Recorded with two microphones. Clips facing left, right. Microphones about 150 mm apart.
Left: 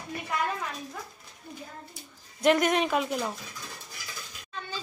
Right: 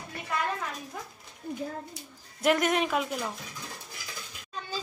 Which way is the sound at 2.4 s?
Centre (ahead or behind).